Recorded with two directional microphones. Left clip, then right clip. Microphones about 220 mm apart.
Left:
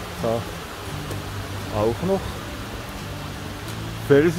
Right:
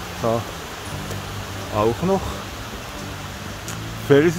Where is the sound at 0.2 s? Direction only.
30° right (ahead or behind).